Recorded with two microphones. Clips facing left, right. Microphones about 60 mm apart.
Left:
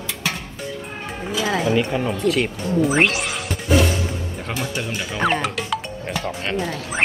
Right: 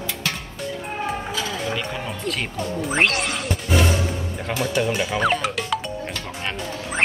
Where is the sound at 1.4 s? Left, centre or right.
Centre.